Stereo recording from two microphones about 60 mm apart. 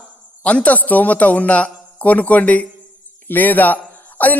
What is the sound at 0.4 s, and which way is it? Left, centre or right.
A man's voice, left.